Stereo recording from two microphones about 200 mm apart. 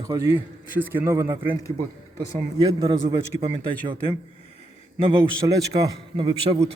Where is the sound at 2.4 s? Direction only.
30° right (ahead or behind).